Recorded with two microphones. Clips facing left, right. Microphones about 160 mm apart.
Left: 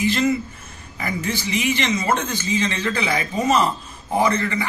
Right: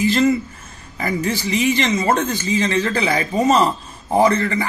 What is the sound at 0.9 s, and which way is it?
Speech, 40° right (ahead or behind).